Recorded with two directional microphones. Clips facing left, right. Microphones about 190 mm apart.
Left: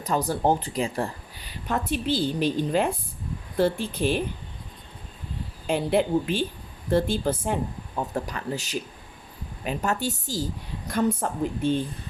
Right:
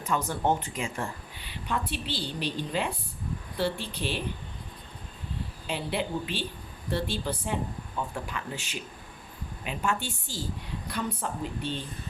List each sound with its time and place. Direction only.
0.0 s a woman's voice: 35° left (ahead or behind)
5.6 s a woman's voice: 45° left (ahead or behind)